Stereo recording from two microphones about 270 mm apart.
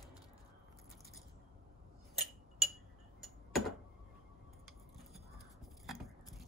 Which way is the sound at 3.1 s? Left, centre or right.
Centre.